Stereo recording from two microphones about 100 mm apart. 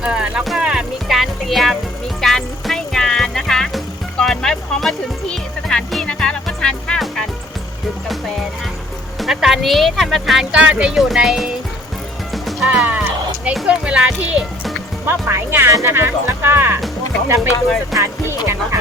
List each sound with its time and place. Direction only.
0.0 s music: 10° right (ahead or behind); by 7.3 s 10° left (ahead or behind)
9.1 s speech: centre (ahead or behind)
12.3 s music: centre (ahead or behind)
13.7 s speech: 10° right (ahead or behind)
15.0 s speech: 25° right (ahead or behind)